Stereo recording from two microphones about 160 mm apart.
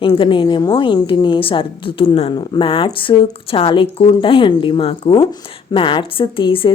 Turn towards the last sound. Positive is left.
turn(degrees=30)  # may be behind; listen again after turning